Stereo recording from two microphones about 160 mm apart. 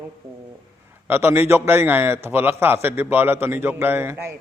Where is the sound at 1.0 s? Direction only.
15° right (ahead or behind).